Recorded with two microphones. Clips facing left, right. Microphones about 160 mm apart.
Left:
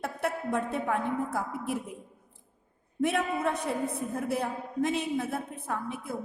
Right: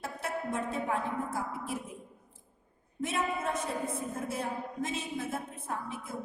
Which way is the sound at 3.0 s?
60° left (ahead or behind).